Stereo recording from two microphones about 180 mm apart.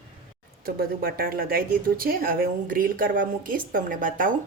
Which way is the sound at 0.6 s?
55° right (ahead or behind).